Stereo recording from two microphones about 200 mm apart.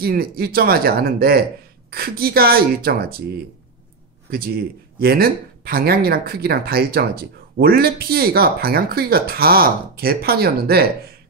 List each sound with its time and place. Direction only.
0.0 s speech: 50° right (ahead or behind)
4.3 s speech: 50° right (ahead or behind)